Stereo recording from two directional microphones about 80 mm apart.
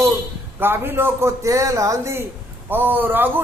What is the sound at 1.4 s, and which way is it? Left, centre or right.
Speech, right.